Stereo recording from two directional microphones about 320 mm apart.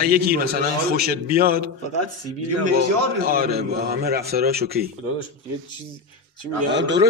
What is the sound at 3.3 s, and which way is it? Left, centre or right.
A man's voice, right.